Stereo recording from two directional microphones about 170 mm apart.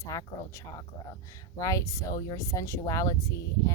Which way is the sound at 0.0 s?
20° left (ahead or behind).